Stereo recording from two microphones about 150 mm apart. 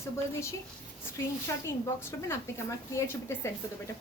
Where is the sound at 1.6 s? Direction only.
15° left (ahead or behind).